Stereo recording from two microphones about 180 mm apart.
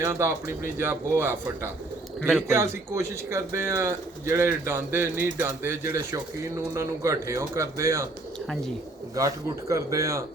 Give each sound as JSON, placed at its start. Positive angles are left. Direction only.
{"t": 0.0, "sound": "speech", "side_deg": -15}
{"t": 9.1, "sound": "speech", "side_deg": -15}